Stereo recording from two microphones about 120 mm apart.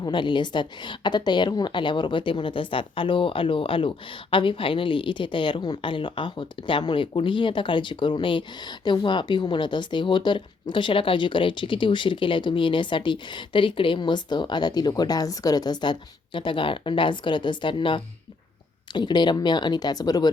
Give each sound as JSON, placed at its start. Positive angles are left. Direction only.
{"t": 0.0, "sound": "a woman's voice", "side_deg": 40}